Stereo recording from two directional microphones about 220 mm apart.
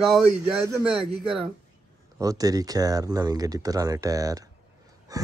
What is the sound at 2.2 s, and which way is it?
Speech, 15° right (ahead or behind).